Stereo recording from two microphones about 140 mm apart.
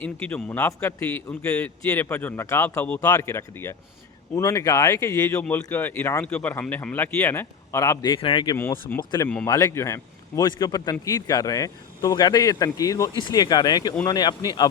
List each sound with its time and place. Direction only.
0.0 s a man's voice: 10° left (ahead or behind); by 8.5 s 35° left (ahead or behind)
8.9 s a man's voice: 10° left (ahead or behind)
9.5 s speech: 25° left (ahead or behind)